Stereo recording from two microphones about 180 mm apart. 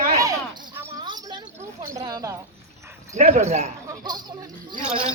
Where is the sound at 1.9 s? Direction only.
20° right (ahead or behind).